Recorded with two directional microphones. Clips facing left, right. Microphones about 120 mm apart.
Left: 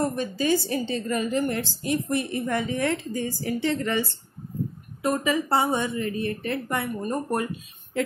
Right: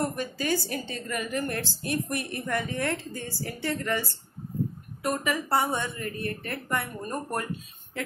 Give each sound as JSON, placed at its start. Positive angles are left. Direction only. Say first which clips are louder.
{"t": 0.0, "sound": "a woman's voice", "louder": "left 4 dB", "side_deg": 20}